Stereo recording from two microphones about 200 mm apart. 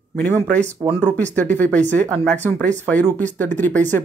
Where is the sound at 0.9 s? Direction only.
10° left (ahead or behind).